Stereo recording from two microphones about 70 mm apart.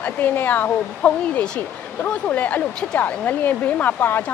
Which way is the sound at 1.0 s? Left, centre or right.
Centre.